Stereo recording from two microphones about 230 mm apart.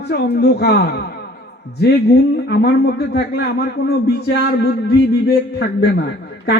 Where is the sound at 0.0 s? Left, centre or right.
Left.